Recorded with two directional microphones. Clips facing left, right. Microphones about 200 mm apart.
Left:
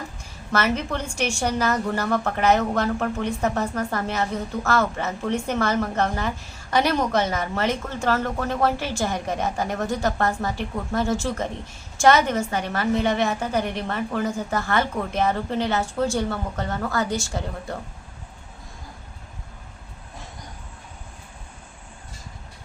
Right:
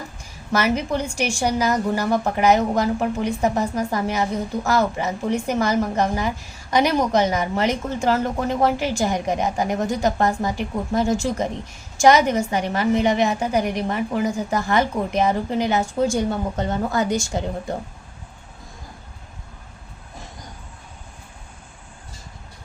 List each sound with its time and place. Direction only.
0.5 s a woman's voice: 15° right (ahead or behind)